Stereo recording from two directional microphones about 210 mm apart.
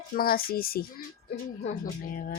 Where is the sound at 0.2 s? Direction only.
45° left (ahead or behind).